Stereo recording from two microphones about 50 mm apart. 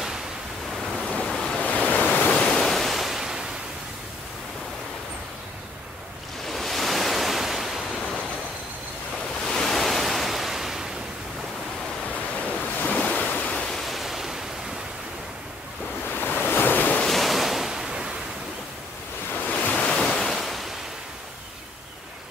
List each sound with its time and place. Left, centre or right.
1.2 s waves: centre
1.6 s waves: left
2.5 s waves: centre
6.4 s waves: centre
9.5 s waves: centre
12.1 s waves: left
13.6 s waves: centre
16.2 s waves: left
17.0 s ocean: centre
19.4 s waves: left; by 20.6 s centre